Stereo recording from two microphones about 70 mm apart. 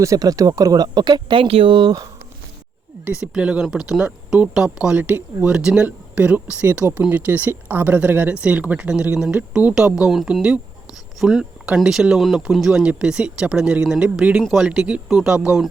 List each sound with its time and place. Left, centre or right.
0.0 s speech: right
1.8 s speech: right
3.0 s speech: centre
5.0 s speech: right
5.5 s speech: centre
11.2 s speech: centre
14.7 s speech: centre